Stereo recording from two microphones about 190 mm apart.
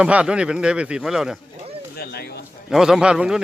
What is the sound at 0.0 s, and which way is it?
A man's voice, 5° right (ahead or behind).